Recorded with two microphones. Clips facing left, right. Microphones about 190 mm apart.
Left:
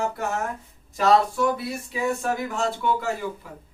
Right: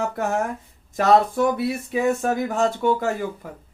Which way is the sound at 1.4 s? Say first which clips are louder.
Right 4 dB; 55° right (ahead or behind).